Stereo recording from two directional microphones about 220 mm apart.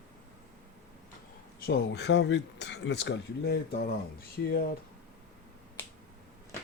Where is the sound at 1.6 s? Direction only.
50° left (ahead or behind).